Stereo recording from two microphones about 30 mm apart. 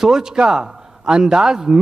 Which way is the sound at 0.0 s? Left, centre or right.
Right.